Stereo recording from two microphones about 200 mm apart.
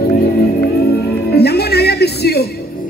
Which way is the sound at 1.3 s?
55° left (ahead or behind).